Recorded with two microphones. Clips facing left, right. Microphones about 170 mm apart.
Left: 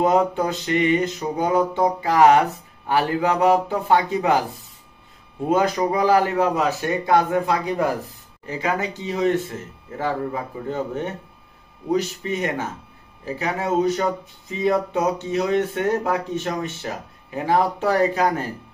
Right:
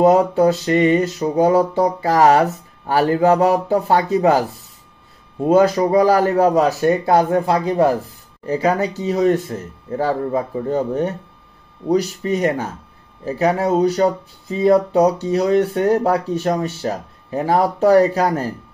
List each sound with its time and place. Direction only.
0.0 s speech: 40° right (ahead or behind)
5.5 s speech: 35° right (ahead or behind)